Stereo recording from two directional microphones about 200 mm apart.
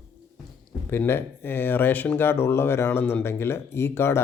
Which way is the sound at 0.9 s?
10° left (ahead or behind).